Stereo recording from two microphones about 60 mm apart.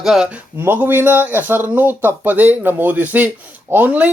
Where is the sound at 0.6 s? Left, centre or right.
Right.